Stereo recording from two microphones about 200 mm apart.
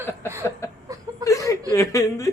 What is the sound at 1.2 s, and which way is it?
Chuckle, 15° left (ahead or behind).